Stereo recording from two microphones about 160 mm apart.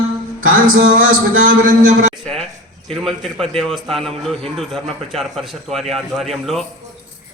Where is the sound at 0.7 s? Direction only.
60° right (ahead or behind).